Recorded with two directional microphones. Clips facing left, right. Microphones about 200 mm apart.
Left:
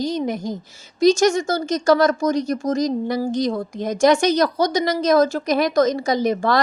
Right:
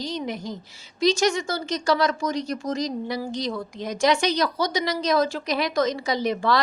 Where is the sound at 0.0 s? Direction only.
45° left (ahead or behind).